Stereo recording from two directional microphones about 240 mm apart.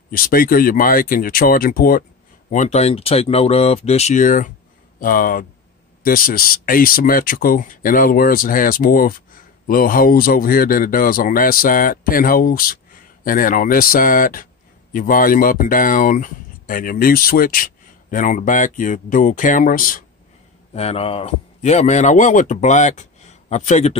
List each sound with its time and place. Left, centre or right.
0.1 s a man's voice: left